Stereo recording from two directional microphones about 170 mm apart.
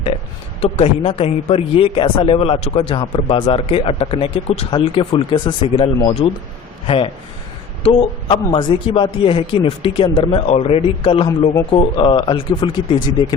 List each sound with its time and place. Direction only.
0.6 s a man's voice: 35° left (ahead or behind)
8.3 s a man's voice: 30° left (ahead or behind)